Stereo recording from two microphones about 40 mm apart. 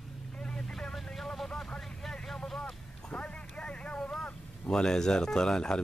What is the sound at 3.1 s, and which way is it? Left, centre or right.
Vehicle, left.